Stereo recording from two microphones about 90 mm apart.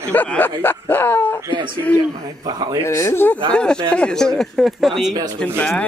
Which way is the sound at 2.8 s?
30° left (ahead or behind).